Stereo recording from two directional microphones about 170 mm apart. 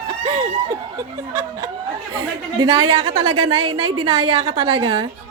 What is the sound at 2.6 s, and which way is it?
A woman's voice, 30° right (ahead or behind).